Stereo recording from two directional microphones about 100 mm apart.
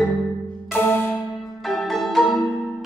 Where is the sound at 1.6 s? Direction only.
Centre (ahead or behind).